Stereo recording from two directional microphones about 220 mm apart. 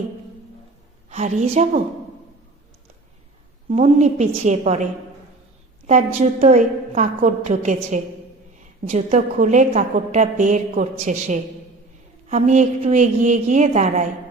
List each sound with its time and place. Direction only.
1.1 s a woman's voice: 30° right (ahead or behind)
3.7 s a woman's voice: 30° right (ahead or behind)
6.1 s a woman's voice: 35° right (ahead or behind)